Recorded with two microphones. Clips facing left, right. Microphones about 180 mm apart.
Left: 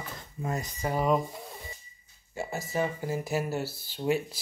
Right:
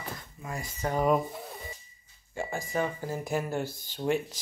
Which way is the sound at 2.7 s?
5° left (ahead or behind).